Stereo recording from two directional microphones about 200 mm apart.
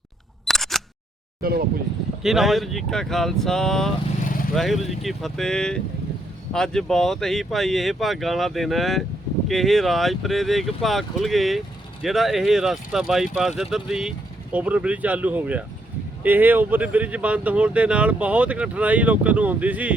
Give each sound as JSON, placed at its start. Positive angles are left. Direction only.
{"t": 0.4, "sound": "single-lens reflex camera", "side_deg": 0}
{"t": 1.4, "sound": "speech", "side_deg": -50}
{"t": 2.2, "sound": "speech", "side_deg": 0}